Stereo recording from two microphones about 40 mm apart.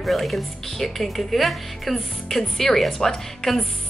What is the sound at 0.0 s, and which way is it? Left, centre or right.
A woman's voice, centre.